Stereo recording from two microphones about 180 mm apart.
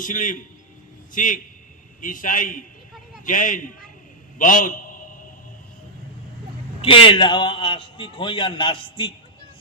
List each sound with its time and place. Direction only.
0.0 s a man's voice: 50° left (ahead or behind)
4.4 s a sound: 45° left (ahead or behind)
6.8 s a man's voice: 30° left (ahead or behind)